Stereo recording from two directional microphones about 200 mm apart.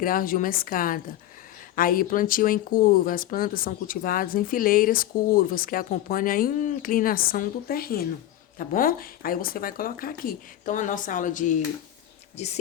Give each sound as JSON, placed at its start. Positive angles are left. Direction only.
{"t": 0.0, "sound": "speech", "side_deg": 45}